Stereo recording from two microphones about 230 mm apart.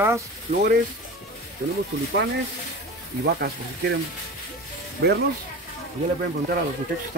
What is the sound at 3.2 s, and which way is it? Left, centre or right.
Speech, right.